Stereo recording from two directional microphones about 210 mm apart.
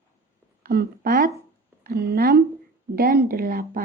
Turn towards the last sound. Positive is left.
turn(degrees=-45)  # may be behind; listen again after turning